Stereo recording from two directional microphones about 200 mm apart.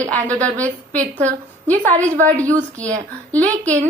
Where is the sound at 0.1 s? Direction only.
5° left (ahead or behind).